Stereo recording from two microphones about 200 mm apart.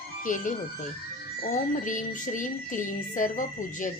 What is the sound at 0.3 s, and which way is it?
Music, 40° left (ahead or behind).